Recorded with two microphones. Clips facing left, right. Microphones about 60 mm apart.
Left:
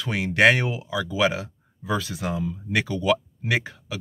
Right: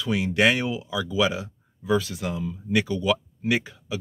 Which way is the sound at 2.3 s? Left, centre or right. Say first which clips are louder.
Right 2 dB; left.